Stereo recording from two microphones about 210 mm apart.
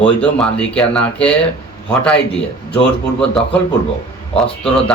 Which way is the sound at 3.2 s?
5° left (ahead or behind).